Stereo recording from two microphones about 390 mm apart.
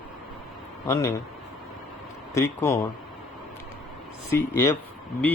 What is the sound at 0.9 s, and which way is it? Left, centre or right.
Speech, centre.